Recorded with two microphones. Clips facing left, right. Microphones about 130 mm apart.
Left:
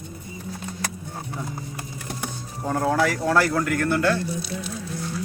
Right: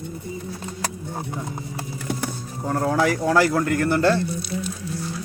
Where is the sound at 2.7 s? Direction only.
Centre (ahead or behind).